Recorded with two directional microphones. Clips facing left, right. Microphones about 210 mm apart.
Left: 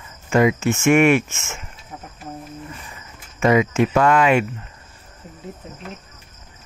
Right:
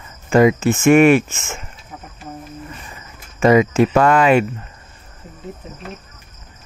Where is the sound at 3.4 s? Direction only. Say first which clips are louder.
Right 4 dB; 35° right (ahead or behind).